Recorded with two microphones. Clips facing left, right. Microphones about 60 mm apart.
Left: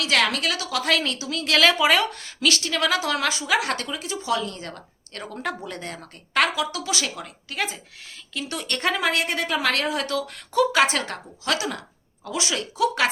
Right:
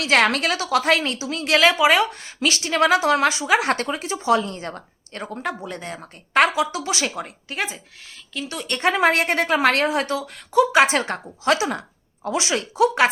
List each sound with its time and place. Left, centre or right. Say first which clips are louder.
0.0 s a woman's voice: right 4 dB; right
1.7 s a woman's voice: right 3 dB; centre
6.3 s a woman's voice: right 4 dB; right
8.3 s speech: right 1 dB; centre
9.0 s a woman's voice: right 5 dB; right
10.2 s speech: right 1 dB; centre
10.6 s a woman's voice: right 3 dB; right